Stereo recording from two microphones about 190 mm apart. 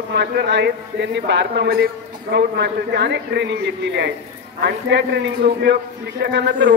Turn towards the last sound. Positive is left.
turn(degrees=-65)  # may be behind; listen again after turning